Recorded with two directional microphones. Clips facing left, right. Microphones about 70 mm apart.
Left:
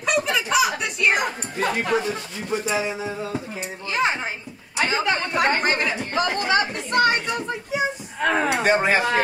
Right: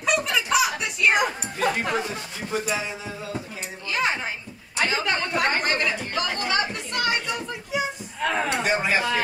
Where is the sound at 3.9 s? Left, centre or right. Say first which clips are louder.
Left 2 dB; left.